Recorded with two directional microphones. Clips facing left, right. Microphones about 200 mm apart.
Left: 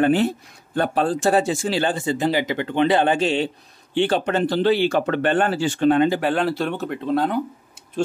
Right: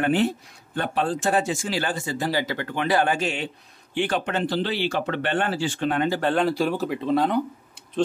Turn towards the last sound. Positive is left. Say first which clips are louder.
# even
turn(degrees=0)  # may be behind; listen again after turning